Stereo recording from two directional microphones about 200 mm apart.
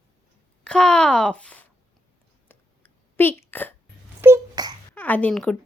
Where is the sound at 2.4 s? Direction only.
10° left (ahead or behind).